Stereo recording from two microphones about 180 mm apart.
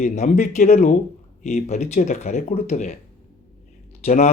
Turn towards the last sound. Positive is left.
turn(degrees=40)  # may be behind; listen again after turning